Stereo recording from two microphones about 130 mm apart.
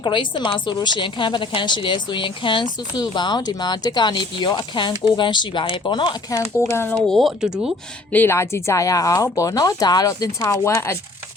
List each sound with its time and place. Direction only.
0.0 s a woman's voice: 40° left (ahead or behind)
6.6 s speech: 15° left (ahead or behind)
7.1 s speech: centre (ahead or behind)
8.1 s speech: 15° left (ahead or behind)